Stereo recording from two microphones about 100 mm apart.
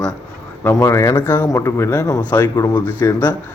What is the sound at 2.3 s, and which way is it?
A man's voice, 20° left (ahead or behind).